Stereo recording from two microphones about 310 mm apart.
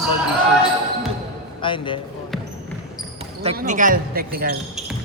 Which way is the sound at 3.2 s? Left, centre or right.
Right.